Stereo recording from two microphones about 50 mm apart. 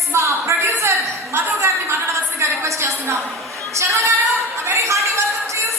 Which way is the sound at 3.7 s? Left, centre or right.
Right.